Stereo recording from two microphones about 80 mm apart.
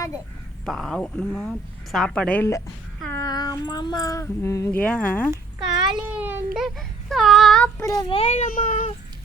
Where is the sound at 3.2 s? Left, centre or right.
Left.